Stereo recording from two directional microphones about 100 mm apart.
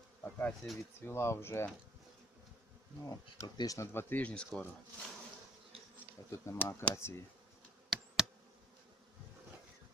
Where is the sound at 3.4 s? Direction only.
45° left (ahead or behind).